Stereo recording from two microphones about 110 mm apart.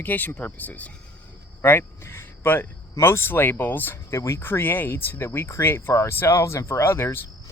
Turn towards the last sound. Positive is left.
turn(degrees=20)  # may be behind; listen again after turning